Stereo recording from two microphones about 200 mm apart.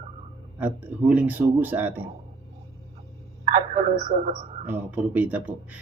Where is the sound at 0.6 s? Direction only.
5° right (ahead or behind).